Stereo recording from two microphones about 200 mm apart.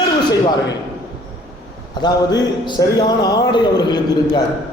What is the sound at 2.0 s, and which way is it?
Speech, 20° left (ahead or behind).